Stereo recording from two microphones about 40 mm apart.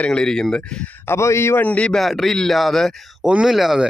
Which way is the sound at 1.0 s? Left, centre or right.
Left.